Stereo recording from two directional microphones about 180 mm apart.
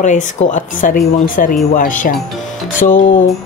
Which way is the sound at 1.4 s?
50° left (ahead or behind).